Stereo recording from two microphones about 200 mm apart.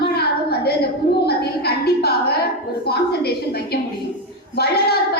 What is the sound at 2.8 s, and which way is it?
Speech, 50° left (ahead or behind).